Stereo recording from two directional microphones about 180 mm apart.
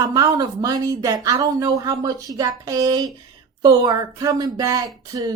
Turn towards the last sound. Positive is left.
turn(degrees=-20)  # may be behind; listen again after turning